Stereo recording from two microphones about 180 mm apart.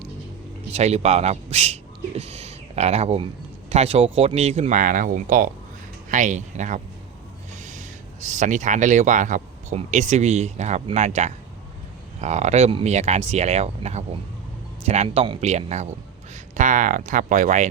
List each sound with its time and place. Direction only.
0.7 s speech: 35° right (ahead or behind)